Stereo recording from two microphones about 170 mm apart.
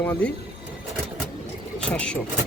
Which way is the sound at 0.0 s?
10° left (ahead or behind).